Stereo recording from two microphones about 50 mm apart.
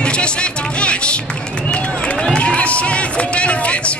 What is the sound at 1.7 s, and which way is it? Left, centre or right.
Run, left.